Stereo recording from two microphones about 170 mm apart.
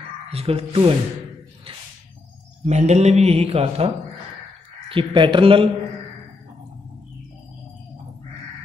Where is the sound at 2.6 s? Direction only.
40° right (ahead or behind).